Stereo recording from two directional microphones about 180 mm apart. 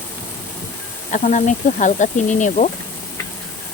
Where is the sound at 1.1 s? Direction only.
40° left (ahead or behind).